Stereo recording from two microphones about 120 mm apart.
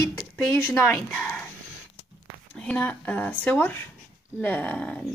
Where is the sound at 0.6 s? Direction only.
15° left (ahead or behind).